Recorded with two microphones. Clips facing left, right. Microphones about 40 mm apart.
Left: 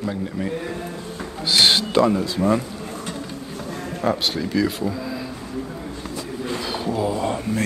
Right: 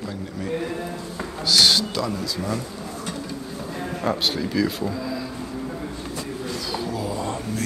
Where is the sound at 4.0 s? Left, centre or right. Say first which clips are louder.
Left 2 dB; centre.